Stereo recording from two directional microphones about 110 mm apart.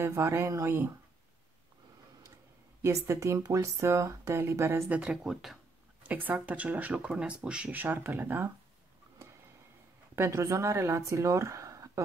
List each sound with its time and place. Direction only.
0.0 s speech: 25° right (ahead or behind)
2.8 s speech: 25° right (ahead or behind); by 5.6 s 5° right (ahead or behind)
6.0 s speech: 15° right (ahead or behind)
10.1 s speech: 25° right (ahead or behind)